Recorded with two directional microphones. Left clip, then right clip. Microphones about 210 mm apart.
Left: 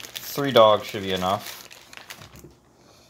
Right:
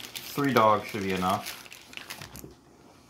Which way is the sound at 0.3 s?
50° left (ahead or behind).